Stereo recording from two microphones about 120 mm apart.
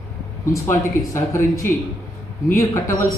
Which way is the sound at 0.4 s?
25° left (ahead or behind).